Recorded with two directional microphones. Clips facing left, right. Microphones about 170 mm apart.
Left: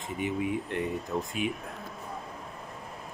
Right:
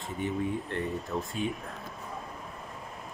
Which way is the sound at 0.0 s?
15° left (ahead or behind).